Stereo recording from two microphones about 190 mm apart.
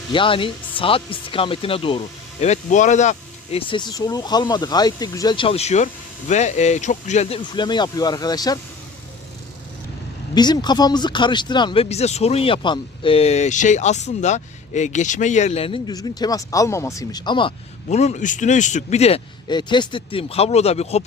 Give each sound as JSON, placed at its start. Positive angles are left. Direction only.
{"t": 0.1, "sound": "speech", "side_deg": 25}
{"t": 3.7, "sound": "speech", "side_deg": 25}
{"t": 10.3, "sound": "speech", "side_deg": 20}
{"t": 17.8, "sound": "a man's voice", "side_deg": 40}